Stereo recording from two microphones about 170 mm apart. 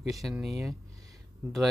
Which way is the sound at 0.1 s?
Centre (ahead or behind).